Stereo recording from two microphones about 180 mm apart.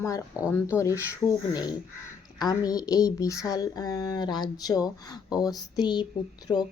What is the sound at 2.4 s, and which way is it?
Speech, 20° left (ahead or behind).